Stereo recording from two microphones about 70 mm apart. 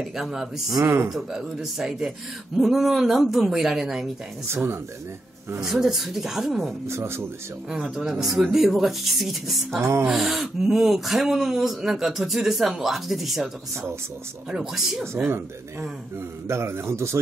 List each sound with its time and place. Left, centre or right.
0.1 s speech: centre
5.6 s speech: centre
6.9 s a man's voice: right
7.7 s a man's voice: centre
9.8 s a man's voice: right
10.0 s speech: centre
14.5 s speech: centre
16.4 s a man's voice: right